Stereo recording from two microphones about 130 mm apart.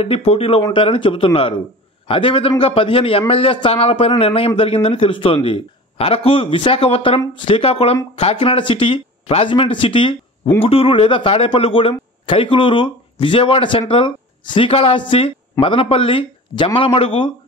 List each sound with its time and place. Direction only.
0.0 s speech: 50° left (ahead or behind)